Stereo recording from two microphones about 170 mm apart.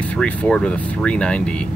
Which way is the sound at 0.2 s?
5° left (ahead or behind).